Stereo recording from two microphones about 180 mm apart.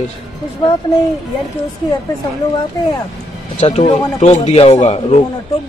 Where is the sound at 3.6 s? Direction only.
35° left (ahead or behind).